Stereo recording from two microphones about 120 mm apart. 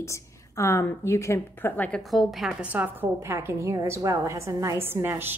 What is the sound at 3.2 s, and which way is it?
A woman's voice, 25° right (ahead or behind).